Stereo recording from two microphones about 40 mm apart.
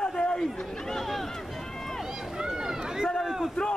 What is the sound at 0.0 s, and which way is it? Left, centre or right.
Chatter, left.